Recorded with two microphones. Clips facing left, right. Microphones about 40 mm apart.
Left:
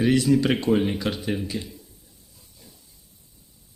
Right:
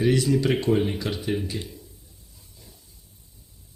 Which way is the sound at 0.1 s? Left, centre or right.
Left.